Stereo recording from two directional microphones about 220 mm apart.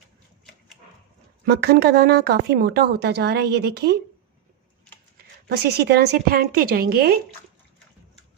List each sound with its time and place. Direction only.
1.5 s speech: 45° right (ahead or behind)
5.1 s speech: 50° right (ahead or behind)